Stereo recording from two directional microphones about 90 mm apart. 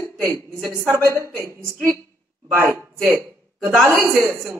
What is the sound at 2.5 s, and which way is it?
Speech, 30° right (ahead or behind).